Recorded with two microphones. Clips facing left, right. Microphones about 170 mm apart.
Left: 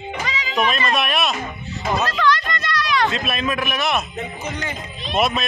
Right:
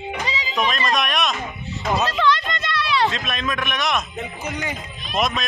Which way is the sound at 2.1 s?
25° right (ahead or behind).